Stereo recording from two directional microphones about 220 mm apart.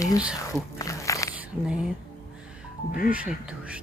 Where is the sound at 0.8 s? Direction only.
15° left (ahead or behind).